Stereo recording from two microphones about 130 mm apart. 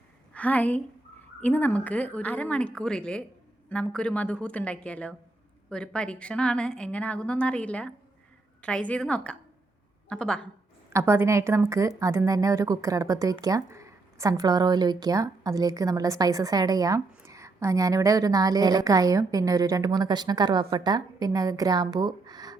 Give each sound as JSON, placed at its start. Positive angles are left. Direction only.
{"t": 0.3, "sound": "a woman's voice", "side_deg": 10}
{"t": 10.8, "sound": "a woman's voice", "side_deg": -20}